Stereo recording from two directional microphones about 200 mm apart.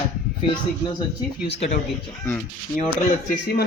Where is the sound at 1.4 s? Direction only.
30° left (ahead or behind).